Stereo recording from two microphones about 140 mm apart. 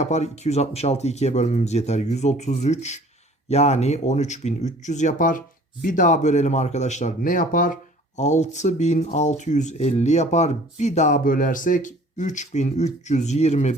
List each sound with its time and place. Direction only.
0.0 s speech: 55° left (ahead or behind)
7.2 s speech: 75° left (ahead or behind); by 13.7 s 50° left (ahead or behind)